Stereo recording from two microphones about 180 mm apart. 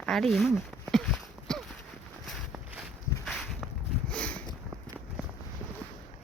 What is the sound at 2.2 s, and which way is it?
Walk, centre (ahead or behind).